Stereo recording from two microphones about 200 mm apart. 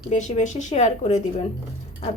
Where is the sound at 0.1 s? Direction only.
35° left (ahead or behind).